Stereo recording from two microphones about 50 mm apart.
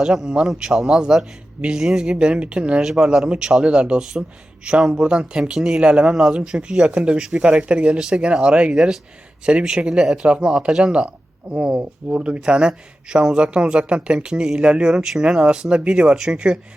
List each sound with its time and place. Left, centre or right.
0.0 s speech: centre